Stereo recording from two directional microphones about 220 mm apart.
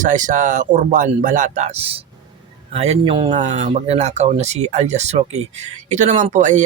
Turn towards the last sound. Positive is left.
turn(degrees=-35)  # may be behind; listen again after turning